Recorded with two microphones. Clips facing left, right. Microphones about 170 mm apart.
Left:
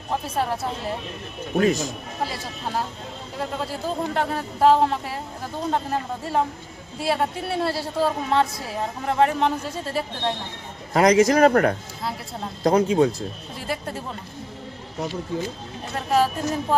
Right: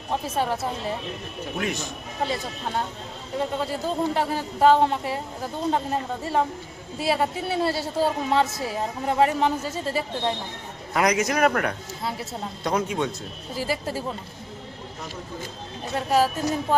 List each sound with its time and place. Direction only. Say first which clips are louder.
0.1 s speech: even; centre (ahead or behind)
1.5 s speech: left 9 dB; 40° left (ahead or behind)
2.2 s speech: right 2 dB; 5° left (ahead or behind)
10.9 s speech: left 6 dB; 30° left (ahead or behind)
13.6 s speech: right 3 dB; centre (ahead or behind)
16.0 s speech: even; centre (ahead or behind)